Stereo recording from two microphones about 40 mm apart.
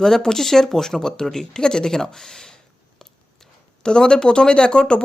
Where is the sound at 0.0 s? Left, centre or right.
Centre.